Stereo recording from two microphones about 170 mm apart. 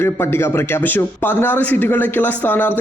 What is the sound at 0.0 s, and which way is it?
A man's voice, 15° left (ahead or behind).